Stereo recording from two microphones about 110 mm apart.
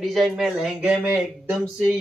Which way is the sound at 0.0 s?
Centre (ahead or behind).